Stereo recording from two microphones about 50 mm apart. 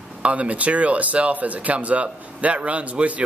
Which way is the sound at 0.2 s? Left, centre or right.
Right.